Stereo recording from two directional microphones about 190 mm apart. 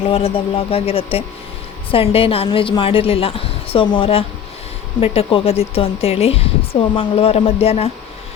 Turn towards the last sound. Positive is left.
turn(degrees=35)  # may be behind; listen again after turning